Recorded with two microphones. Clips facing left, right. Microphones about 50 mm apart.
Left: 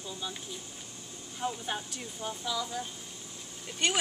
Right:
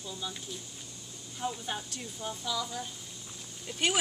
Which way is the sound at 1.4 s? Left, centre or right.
Centre.